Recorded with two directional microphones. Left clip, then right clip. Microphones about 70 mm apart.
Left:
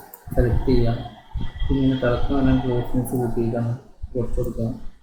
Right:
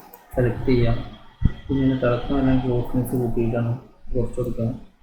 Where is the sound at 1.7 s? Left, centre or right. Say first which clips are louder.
Even; left.